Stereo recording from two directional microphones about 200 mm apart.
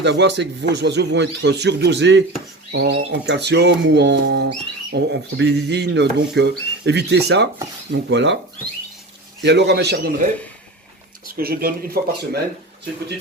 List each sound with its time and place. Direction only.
0.0 s speech: 60° right (ahead or behind)
9.4 s speech: 60° right (ahead or behind)
11.3 s speech: 50° right (ahead or behind)